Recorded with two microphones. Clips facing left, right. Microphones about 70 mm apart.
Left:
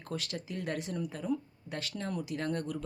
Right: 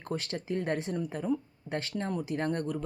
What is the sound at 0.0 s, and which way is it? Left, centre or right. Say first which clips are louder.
Speech: right 4 dB; right.